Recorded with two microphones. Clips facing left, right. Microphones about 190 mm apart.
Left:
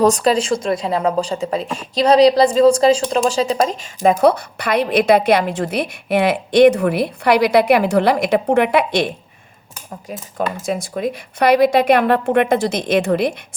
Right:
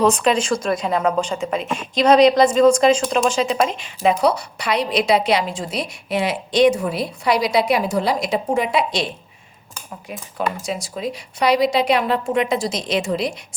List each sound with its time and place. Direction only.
0.0 s speech: 40° left (ahead or behind); by 13.3 s 55° left (ahead or behind)